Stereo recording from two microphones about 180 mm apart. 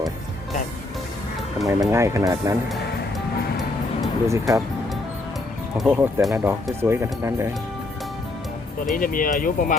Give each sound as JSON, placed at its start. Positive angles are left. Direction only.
{"t": 1.6, "sound": "speech", "side_deg": -15}
{"t": 4.3, "sound": "speech", "side_deg": -20}
{"t": 5.7, "sound": "speech", "side_deg": -5}
{"t": 8.9, "sound": "speech", "side_deg": 50}